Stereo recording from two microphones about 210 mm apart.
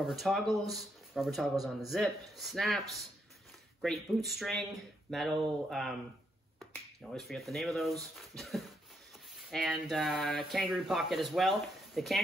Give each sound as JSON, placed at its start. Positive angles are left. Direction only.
{"t": 0.0, "sound": "speech", "side_deg": 0}
{"t": 3.8, "sound": "speech", "side_deg": 0}